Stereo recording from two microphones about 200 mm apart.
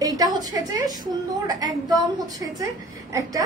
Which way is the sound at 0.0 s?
20° right (ahead or behind).